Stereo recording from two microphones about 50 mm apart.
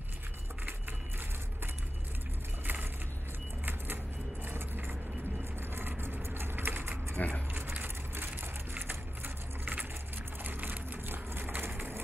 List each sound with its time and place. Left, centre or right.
2.6 s vehicle: right
3.6 s a sound: right
4.5 s vehicle: right
7.2 s keys jangling: left
8.1 s vehicle: right